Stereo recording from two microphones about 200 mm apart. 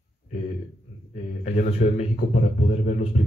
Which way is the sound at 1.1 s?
35° left (ahead or behind).